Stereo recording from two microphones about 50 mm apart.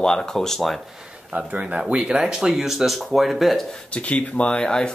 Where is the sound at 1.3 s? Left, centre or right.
Right; by 3.6 s centre.